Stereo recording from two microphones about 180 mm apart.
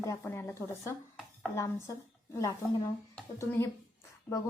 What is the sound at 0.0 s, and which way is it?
Speech, 15° left (ahead or behind).